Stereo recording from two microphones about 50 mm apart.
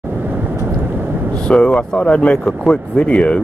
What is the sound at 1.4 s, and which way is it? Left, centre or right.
Speech, centre.